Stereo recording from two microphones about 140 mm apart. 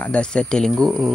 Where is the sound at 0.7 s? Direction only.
25° right (ahead or behind).